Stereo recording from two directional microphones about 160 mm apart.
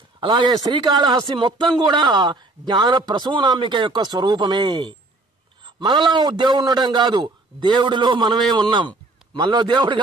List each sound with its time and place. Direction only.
0.2 s a man's voice: 30° right (ahead or behind)